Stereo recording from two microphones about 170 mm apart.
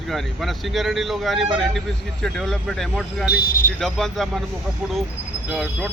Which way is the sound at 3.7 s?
Centre (ahead or behind).